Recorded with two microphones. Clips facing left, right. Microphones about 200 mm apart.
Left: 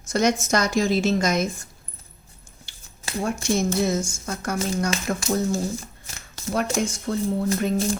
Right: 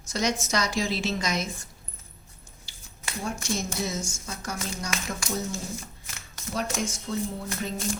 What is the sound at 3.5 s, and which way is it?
A woman's voice, 55° left (ahead or behind).